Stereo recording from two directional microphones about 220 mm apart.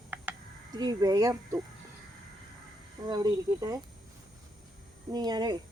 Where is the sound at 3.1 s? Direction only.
20° right (ahead or behind).